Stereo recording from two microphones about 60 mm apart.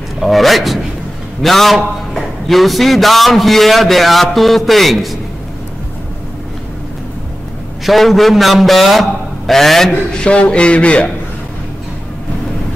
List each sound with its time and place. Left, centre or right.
0.2 s a man's voice: centre
7.8 s a man's voice: centre
10.1 s a man's voice: centre